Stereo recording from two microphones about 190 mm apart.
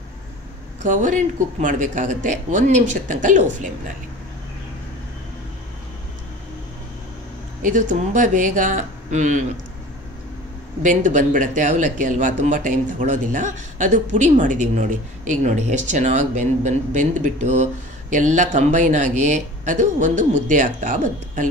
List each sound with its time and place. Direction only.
0.8 s speech: 40° right (ahead or behind)
7.6 s speech: 45° right (ahead or behind)
10.8 s speech: 40° right (ahead or behind)